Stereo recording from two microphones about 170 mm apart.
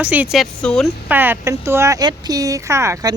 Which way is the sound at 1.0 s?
10° right (ahead or behind).